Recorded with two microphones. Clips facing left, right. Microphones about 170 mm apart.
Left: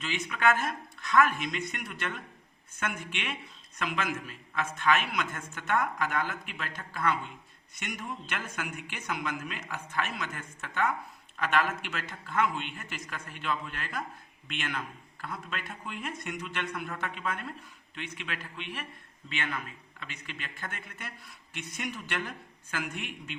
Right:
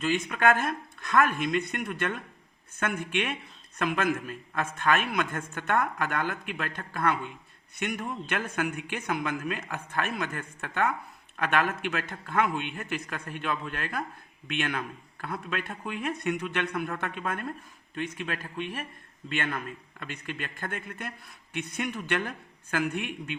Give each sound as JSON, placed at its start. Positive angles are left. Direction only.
{"t": 0.3, "sound": "a man's voice", "side_deg": -50}